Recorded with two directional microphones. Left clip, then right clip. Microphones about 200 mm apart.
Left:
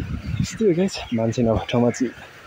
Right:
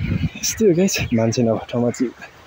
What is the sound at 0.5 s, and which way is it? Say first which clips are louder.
Speech: right 3 dB; 10° right (ahead or behind).